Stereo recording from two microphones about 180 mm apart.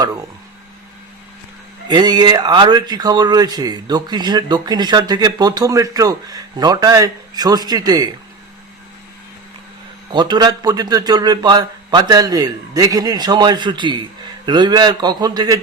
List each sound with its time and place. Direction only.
1.9 s speech: 25° right (ahead or behind)
10.1 s speech: 25° right (ahead or behind)